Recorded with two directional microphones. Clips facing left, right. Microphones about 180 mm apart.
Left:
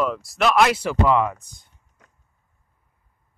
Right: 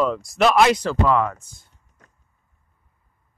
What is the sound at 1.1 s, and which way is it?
Speech, 15° left (ahead or behind).